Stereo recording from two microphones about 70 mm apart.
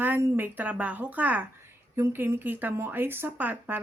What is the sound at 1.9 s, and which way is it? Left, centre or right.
Speech, right.